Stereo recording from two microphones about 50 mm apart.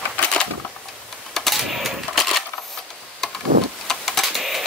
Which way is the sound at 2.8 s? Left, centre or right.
Centre.